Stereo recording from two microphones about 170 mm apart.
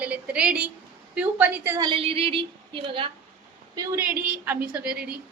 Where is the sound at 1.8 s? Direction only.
30° right (ahead or behind).